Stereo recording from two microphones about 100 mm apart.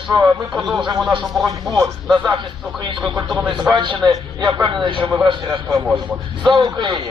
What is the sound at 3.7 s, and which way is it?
A man's voice, 55° right (ahead or behind).